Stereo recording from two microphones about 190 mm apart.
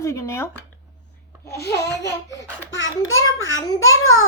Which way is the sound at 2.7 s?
90° left.